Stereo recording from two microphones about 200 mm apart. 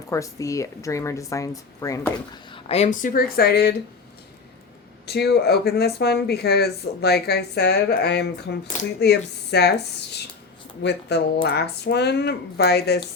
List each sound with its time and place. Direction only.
0.1 s speech: 15° left (ahead or behind)
2.5 s speech: 30° left (ahead or behind); by 3.8 s 50° left (ahead or behind)
5.0 s speech: 55° left (ahead or behind)